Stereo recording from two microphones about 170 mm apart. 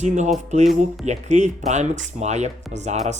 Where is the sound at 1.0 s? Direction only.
45° right (ahead or behind).